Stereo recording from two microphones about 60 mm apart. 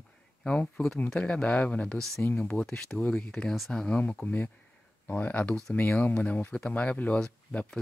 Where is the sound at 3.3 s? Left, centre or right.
Centre.